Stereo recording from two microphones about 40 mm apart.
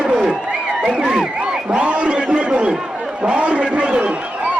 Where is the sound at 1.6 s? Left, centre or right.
Right.